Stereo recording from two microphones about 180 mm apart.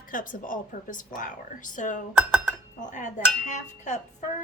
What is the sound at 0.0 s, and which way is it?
Speech, 50° left (ahead or behind).